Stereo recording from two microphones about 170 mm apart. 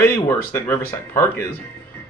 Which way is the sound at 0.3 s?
15° left (ahead or behind).